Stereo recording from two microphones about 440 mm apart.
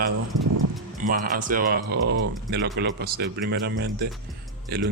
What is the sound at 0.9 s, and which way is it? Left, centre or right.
Speech, centre.